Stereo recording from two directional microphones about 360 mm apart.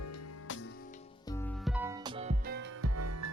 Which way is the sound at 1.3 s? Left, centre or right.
Centre.